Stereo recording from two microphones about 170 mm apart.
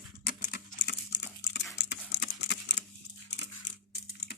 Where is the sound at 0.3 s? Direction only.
75° left (ahead or behind); by 2.8 s 90° left.